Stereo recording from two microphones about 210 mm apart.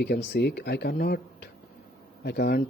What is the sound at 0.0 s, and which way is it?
Speech, 50° left (ahead or behind).